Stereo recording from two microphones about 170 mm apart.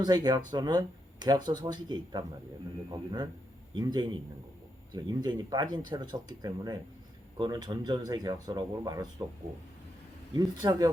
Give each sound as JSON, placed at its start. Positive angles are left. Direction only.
{"t": 0.0, "sound": "speech", "side_deg": -25}
{"t": 10.3, "sound": "speech", "side_deg": -20}